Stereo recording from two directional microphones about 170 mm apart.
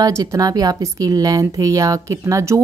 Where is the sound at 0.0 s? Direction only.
20° right (ahead or behind).